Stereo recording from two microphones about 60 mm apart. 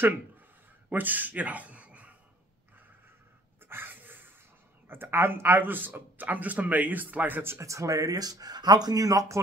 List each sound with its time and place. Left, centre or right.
0.8 s a man's voice: right
3.6 s dog: right
4.8 s a man's voice: right
7.5 s speech: right